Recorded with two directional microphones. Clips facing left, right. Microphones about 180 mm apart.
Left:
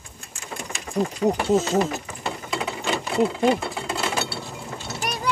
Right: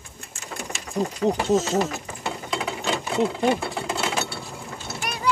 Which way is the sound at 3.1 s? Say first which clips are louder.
Left 2 dB; 5° left (ahead or behind).